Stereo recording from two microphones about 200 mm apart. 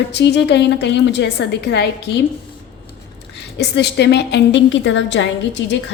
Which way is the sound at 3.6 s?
60° left (ahead or behind).